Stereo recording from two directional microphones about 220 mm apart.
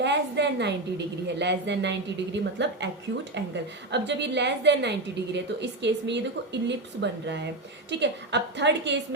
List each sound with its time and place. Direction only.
0.0 s a woman's voice: 50° right (ahead or behind)